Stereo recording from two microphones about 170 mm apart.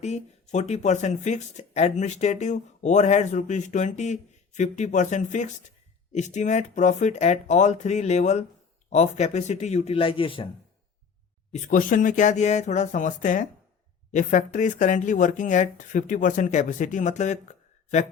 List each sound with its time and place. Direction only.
0.0 s speech: 40° left (ahead or behind)
11.5 s speech: 50° left (ahead or behind)